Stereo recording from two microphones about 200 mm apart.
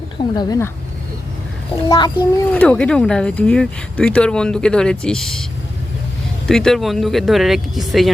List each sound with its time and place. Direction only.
0.2 s speech: 20° left (ahead or behind)
1.7 s a child's voice: 15° left (ahead or behind)
2.5 s speech: 5° left (ahead or behind)
6.5 s speech: centre (ahead or behind)